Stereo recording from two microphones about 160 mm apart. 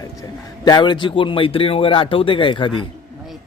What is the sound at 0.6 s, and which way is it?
Speech, 25° left (ahead or behind).